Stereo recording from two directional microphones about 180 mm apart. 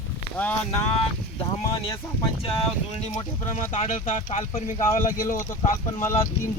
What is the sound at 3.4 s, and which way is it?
Speech, 45° left (ahead or behind).